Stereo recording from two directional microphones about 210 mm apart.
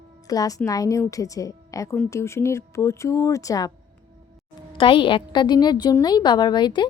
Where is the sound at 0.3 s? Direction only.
15° left (ahead or behind).